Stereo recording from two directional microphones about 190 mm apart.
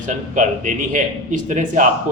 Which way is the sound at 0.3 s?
40° right (ahead or behind).